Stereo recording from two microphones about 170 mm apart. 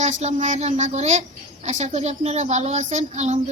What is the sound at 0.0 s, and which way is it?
A woman's voice, 45° right (ahead or behind).